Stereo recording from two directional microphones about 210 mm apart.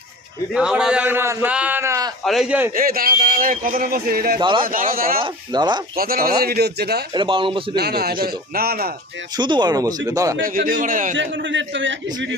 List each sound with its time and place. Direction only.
0.5 s a man's voice: 5° right (ahead or behind)
2.2 s a man's voice: centre (ahead or behind)
2.7 s a man's voice: 45° right (ahead or behind)
4.4 s a man's voice: 25° right (ahead or behind)
4.6 s a man's voice: 40° right (ahead or behind)
5.2 s a man's voice: 20° right (ahead or behind)
6.0 s a man's voice: 45° right (ahead or behind)
7.1 s a man's voice: 25° right (ahead or behind)
7.8 s a man's voice: 50° right (ahead or behind)
9.4 s a man's voice: 20° right (ahead or behind)
10.4 s a man's voice: 40° right (ahead or behind)
11.2 s a man's voice: 60° right (ahead or behind)